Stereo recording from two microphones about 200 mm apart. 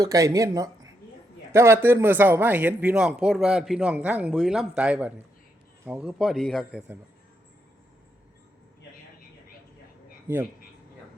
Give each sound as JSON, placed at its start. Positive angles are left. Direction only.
{"t": 0.0, "sound": "a man's voice", "side_deg": -20}